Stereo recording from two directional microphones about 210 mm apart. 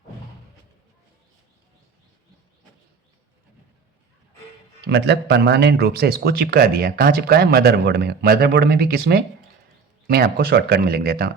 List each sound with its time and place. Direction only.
4.9 s speech: 55° right (ahead or behind)